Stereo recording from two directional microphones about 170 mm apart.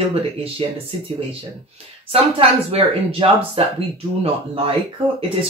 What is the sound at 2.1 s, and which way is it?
Speech, 35° right (ahead or behind).